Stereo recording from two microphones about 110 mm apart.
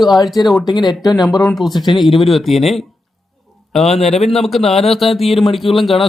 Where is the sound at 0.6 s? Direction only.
40° left (ahead or behind).